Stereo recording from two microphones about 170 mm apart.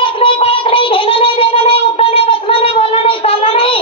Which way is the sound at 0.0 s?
30° left (ahead or behind).